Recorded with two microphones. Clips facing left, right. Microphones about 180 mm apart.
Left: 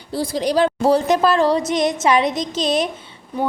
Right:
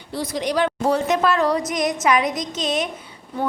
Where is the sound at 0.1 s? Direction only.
30° left (ahead or behind).